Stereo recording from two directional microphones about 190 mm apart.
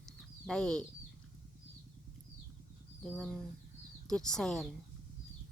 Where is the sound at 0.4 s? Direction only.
5° left (ahead or behind).